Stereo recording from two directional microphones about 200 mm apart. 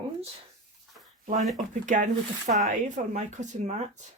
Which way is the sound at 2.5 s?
40° right (ahead or behind).